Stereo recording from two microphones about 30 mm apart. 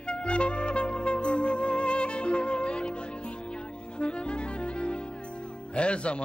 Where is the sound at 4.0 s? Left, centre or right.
Left.